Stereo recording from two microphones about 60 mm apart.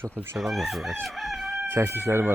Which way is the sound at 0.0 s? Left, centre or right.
Right.